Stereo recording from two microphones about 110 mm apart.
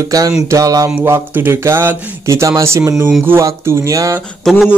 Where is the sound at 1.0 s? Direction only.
20° right (ahead or behind).